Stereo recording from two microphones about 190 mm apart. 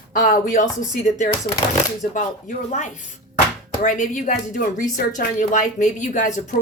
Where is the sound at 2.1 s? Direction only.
40° left (ahead or behind).